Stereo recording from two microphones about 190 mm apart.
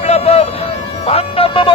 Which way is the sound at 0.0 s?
35° left (ahead or behind).